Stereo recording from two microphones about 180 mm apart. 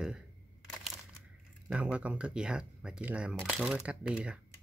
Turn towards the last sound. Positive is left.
turn(degrees=-5)  # may be behind; listen again after turning